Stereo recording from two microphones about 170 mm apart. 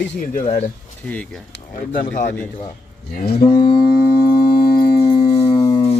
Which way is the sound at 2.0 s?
50° left (ahead or behind).